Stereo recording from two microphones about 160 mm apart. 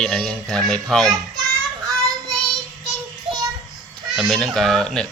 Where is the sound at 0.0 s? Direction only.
5° left (ahead or behind).